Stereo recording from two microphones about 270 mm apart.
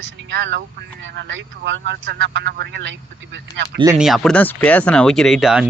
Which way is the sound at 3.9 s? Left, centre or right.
Centre.